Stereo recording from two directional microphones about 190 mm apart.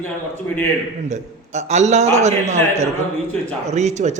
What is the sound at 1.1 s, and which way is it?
A man's voice, 40° right (ahead or behind).